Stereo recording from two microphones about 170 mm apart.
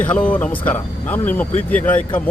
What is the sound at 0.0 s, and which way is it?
Speech, 10° left (ahead or behind).